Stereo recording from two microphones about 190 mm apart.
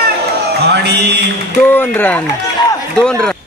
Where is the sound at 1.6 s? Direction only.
10° left (ahead or behind).